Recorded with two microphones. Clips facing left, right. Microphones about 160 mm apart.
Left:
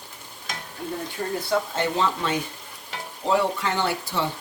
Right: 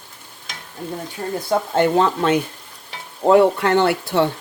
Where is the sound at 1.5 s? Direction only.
55° right (ahead or behind).